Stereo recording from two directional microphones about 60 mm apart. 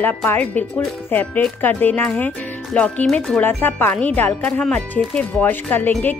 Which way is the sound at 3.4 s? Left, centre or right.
Left.